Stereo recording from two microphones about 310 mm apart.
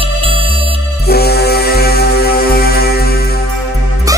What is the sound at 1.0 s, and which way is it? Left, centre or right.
Music, left.